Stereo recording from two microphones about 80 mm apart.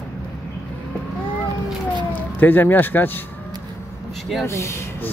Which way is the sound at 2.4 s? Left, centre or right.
Left.